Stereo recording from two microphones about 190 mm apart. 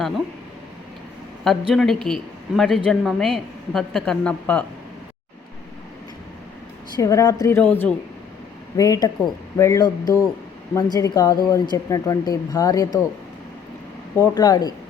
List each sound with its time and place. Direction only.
1.5 s a woman's voice: centre (ahead or behind)
6.9 s a woman's voice: 15° left (ahead or behind)
14.2 s speech: 20° left (ahead or behind)